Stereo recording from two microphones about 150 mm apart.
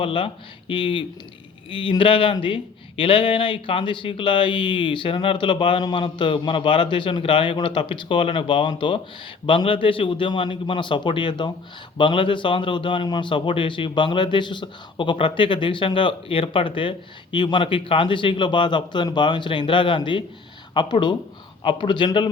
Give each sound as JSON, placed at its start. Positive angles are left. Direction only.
{"t": 0.0, "sound": "speech", "side_deg": 35}